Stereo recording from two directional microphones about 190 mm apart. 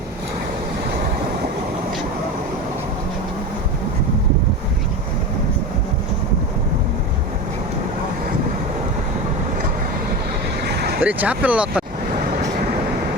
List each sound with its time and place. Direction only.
10.6 s vehicle: 60° right (ahead or behind)
11.0 s speech: 5° right (ahead or behind)